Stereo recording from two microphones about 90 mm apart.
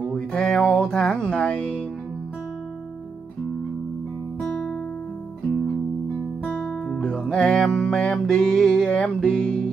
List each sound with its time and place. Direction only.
0.1 s speech: 5° left (ahead or behind)
6.4 s music: 15° left (ahead or behind)